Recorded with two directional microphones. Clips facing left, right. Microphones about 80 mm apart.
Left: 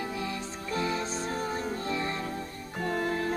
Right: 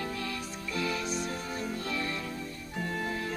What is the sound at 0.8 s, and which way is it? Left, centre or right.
Music, left.